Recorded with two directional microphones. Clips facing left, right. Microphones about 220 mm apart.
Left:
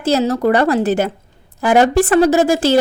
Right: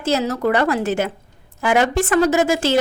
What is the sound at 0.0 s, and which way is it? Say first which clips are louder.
A woman's voice: left 4 dB; 35° left (ahead or behind).